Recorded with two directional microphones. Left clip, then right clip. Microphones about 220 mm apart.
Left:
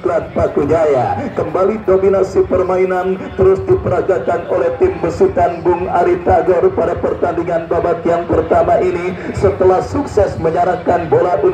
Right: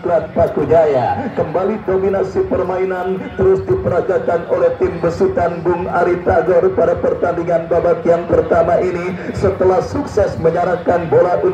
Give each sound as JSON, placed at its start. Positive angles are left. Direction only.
{"t": 0.1, "sound": "speech", "side_deg": 55}
{"t": 3.3, "sound": "speech", "side_deg": 25}